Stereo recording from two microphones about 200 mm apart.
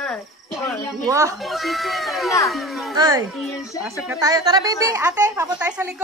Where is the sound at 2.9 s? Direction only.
20° right (ahead or behind).